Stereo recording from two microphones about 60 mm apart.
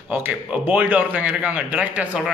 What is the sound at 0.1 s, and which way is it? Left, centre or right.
A man's voice, right.